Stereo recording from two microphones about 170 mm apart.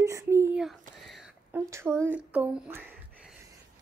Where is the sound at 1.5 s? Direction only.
15° right (ahead or behind).